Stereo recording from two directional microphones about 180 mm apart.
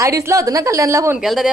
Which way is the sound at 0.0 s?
15° right (ahead or behind).